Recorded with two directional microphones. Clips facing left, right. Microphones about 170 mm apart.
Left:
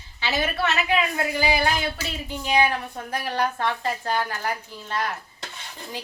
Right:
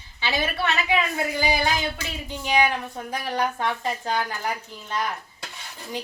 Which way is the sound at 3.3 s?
10° right (ahead or behind).